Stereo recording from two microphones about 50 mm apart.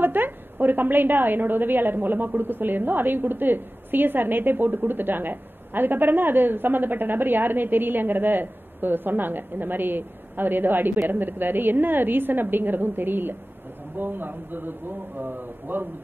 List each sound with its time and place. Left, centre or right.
0.0 s a woman's voice: right